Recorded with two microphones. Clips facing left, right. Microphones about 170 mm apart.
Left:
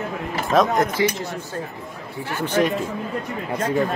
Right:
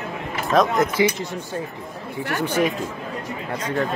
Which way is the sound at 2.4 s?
10° right (ahead or behind).